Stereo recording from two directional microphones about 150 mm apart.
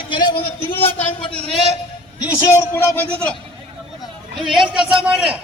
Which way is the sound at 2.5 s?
15° left (ahead or behind).